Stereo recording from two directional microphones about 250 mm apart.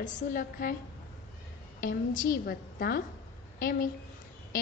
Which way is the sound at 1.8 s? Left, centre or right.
Left.